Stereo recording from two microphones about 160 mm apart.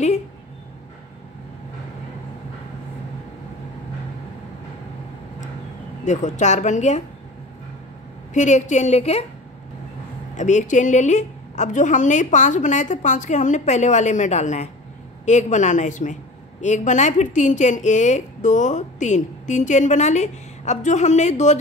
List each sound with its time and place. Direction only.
6.0 s speech: 50° left (ahead or behind)
8.3 s speech: 50° left (ahead or behind)
10.3 s speech: 50° left (ahead or behind)